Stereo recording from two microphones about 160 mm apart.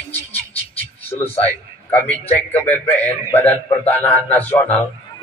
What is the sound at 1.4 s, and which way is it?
A man's voice, 10° left (ahead or behind).